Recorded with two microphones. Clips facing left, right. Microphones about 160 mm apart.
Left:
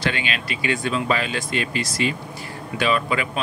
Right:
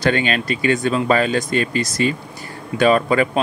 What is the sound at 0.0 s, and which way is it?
Speech, 45° right (ahead or behind).